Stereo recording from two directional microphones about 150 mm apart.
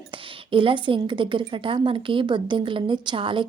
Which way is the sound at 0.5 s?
35° right (ahead or behind).